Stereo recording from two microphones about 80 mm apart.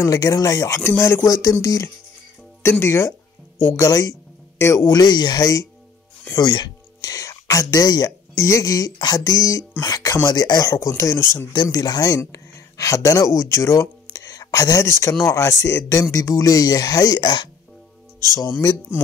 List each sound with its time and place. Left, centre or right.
0.0 s speech: left
0.9 s speech: left
1.2 s speech: left
3.8 s speech: left
5.0 s speech: left
6.3 s a sound: left
8.4 s speech: left
11.5 s speech: left
12.2 s speech: left
18.5 s speech: left